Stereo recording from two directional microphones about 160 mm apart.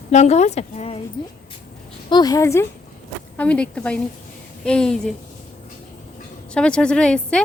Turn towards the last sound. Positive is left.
turn(degrees=5)  # may be behind; listen again after turning